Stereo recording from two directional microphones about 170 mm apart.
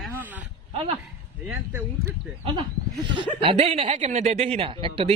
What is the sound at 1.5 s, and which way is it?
Speech, 10° right (ahead or behind).